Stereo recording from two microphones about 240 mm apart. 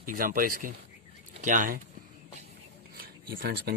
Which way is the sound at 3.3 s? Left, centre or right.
Right.